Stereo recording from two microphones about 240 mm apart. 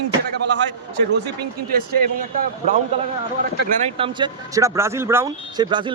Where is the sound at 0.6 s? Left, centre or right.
Right.